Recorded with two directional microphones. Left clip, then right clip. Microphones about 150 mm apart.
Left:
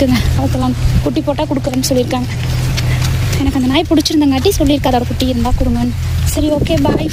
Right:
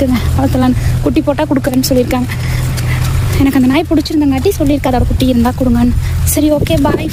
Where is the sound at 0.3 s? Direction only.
40° right (ahead or behind).